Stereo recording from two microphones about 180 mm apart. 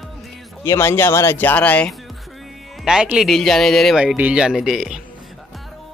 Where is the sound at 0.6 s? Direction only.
15° left (ahead or behind).